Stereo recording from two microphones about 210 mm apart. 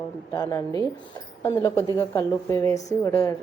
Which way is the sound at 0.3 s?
15° left (ahead or behind).